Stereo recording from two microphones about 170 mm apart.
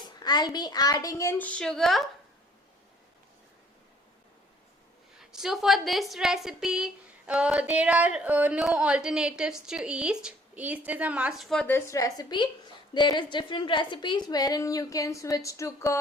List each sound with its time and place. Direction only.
0.2 s a woman's voice: 25° left (ahead or behind); by 2.0 s centre (ahead or behind)
5.2 s a woman's voice: 5° right (ahead or behind)
11.7 s a woman's voice: 20° left (ahead or behind)